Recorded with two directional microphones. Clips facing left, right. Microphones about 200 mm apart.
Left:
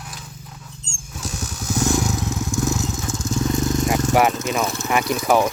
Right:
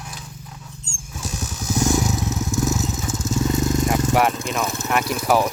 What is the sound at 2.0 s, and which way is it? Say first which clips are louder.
Vehicle: even; 5° right (ahead or behind).